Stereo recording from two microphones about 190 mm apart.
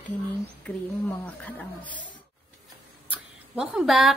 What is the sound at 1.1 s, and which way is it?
Speech, 10° left (ahead or behind).